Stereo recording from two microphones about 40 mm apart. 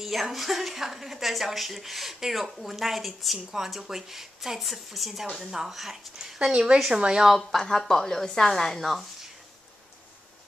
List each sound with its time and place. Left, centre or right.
0.0 s a woman's voice: centre
5.2 s a woman's voice: centre
5.5 s speech: centre
7.3 s a woman's voice: centre